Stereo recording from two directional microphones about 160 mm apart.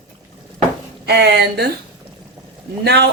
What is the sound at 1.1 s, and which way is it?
Speech, 90° right.